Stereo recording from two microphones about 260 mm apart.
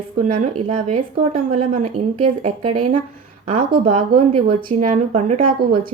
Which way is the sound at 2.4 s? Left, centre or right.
Right.